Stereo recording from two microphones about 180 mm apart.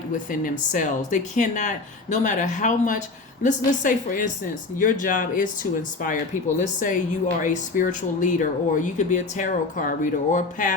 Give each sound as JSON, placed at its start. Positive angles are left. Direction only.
{"t": 0.3, "sound": "speech", "side_deg": 45}
{"t": 6.6, "sound": "speech", "side_deg": 45}